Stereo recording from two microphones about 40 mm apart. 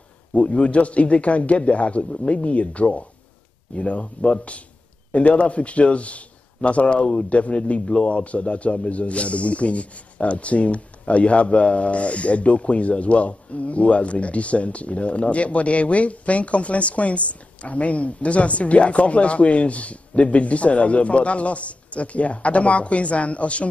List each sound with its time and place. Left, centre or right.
0.3 s a man's voice: left